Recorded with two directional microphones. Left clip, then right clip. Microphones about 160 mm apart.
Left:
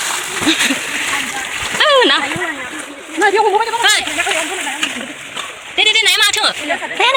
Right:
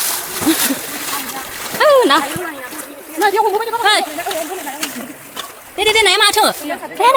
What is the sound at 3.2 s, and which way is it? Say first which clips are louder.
Speech: left 2 dB; 30° left (ahead or behind).